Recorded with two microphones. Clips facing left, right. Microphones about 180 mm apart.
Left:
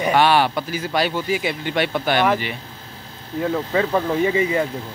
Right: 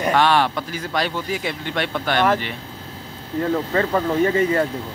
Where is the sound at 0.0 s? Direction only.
5° left (ahead or behind).